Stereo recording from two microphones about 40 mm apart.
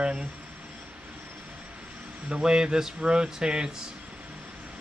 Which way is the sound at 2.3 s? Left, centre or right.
Centre.